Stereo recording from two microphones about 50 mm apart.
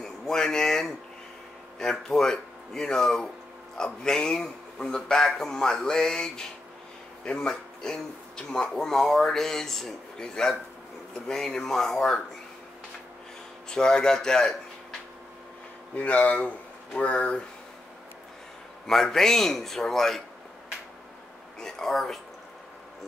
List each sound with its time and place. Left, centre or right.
0.0 s a sound: centre
1.8 s speech: centre
13.7 s speech: centre
16.0 s speech: left
18.9 s speech: centre
21.5 s speech: centre